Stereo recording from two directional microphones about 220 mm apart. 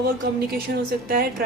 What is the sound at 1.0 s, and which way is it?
Speech, 40° right (ahead or behind).